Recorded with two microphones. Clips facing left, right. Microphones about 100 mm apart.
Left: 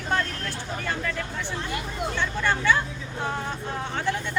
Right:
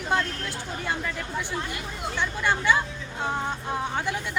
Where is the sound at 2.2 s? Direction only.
15° right (ahead or behind).